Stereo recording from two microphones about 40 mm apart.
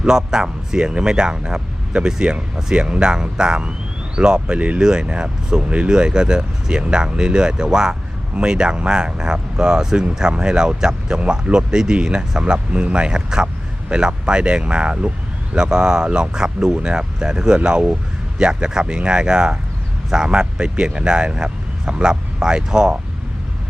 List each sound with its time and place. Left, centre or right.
0.0 s speech: centre
4.5 s speech: right
4.8 s speech: centre
5.6 s speech: right
5.9 s speech: centre